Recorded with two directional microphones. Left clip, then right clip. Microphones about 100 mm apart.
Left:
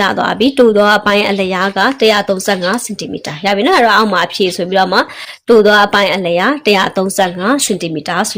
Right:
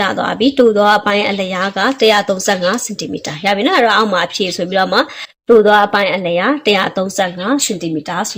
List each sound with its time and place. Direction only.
0.0 s a woman's voice: 45° left (ahead or behind)